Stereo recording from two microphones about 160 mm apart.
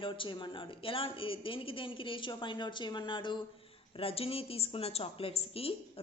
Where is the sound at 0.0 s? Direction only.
30° left (ahead or behind).